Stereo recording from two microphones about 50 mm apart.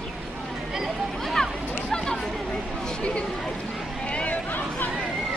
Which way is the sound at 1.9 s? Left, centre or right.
Centre.